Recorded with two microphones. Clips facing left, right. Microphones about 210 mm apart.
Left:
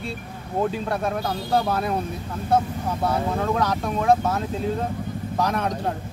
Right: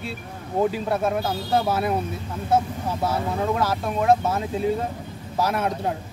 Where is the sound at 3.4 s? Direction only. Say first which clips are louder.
Even; 5° right (ahead or behind).